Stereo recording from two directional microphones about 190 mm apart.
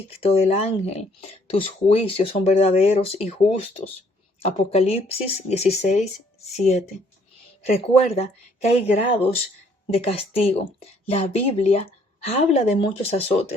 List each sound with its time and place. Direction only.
0.2 s speech: 30° left (ahead or behind)
7.6 s speech: 35° left (ahead or behind)